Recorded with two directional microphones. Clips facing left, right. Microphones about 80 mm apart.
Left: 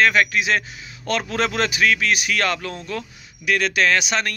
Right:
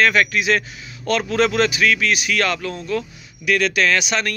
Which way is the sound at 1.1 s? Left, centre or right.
Left.